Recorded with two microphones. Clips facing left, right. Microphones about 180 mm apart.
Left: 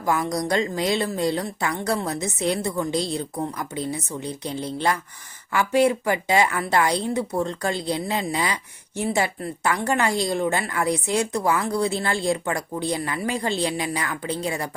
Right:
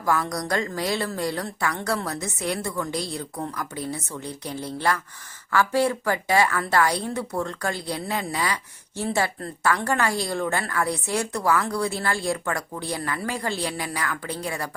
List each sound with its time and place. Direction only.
0.0 s speech: 20° left (ahead or behind)